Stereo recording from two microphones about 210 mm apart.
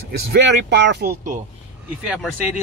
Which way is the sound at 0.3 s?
55° right (ahead or behind).